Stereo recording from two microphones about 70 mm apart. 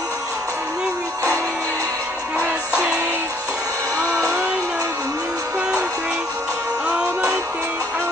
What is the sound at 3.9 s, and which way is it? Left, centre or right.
Music, right.